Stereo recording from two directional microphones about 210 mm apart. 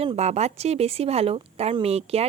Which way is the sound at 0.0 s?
30° right (ahead or behind).